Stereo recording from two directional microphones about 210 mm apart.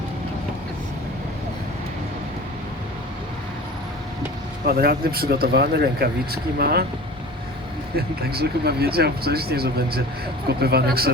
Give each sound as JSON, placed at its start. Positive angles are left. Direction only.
{"t": 4.6, "sound": "speech", "side_deg": -45}
{"t": 7.9, "sound": "speech", "side_deg": -50}